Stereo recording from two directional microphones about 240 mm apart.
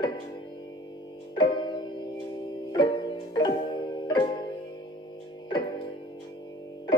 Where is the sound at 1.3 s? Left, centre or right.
Centre.